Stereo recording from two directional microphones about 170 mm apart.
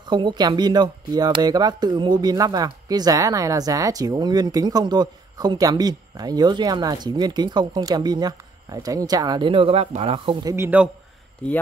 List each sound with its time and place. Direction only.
0.0 s speech: 25° right (ahead or behind)
10.5 s a man's voice: 10° right (ahead or behind)
11.4 s speech: 10° left (ahead or behind)